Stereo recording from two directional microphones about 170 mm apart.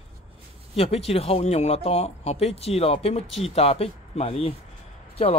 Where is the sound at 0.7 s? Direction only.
35° left (ahead or behind).